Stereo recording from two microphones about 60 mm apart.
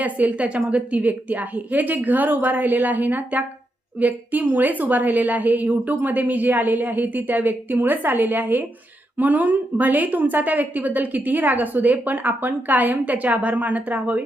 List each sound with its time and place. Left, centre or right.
0.0 s a woman's voice: right